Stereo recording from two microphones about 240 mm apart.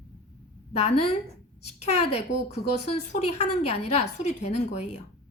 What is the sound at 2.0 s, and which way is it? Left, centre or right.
Speech, left.